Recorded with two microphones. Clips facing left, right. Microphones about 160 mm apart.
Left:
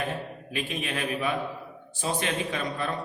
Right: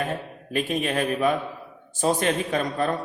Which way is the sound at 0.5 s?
45° right (ahead or behind).